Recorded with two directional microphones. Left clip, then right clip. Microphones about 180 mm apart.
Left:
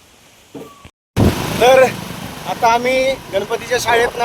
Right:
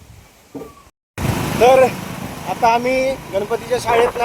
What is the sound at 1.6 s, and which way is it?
Speech, 10° left (ahead or behind).